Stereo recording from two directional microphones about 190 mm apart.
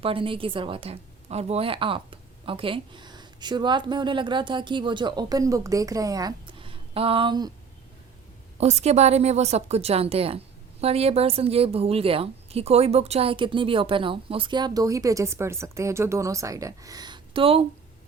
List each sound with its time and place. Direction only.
0.0 s a woman's voice: 30° right (ahead or behind)
8.5 s a woman's voice: 35° right (ahead or behind)